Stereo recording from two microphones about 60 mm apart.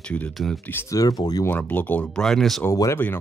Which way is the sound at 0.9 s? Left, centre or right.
Left.